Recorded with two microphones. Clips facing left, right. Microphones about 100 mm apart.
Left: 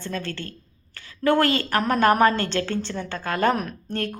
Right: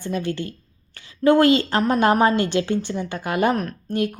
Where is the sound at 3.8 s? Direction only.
10° right (ahead or behind).